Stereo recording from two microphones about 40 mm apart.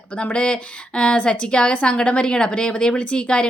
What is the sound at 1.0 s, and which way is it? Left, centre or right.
A woman's voice, left.